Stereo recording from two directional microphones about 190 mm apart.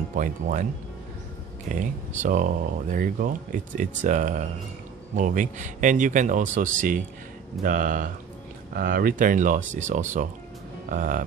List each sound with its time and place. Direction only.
0.1 s speech: 45° right (ahead or behind)
1.7 s speech: 40° right (ahead or behind)